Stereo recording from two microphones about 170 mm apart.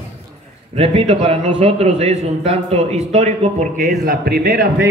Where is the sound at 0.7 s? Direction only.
35° right (ahead or behind).